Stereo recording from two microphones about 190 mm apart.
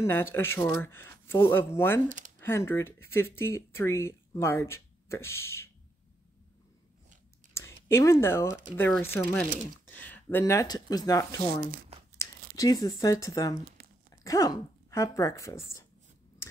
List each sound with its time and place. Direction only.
0.0 s speech: 10° left (ahead or behind)
2.0 s speech: 40° right (ahead or behind)
2.4 s speech: 10° left (ahead or behind)
7.5 s speech: 15° left (ahead or behind)
13.8 s a sound: 55° right (ahead or behind)
14.2 s speech: 20° left (ahead or behind)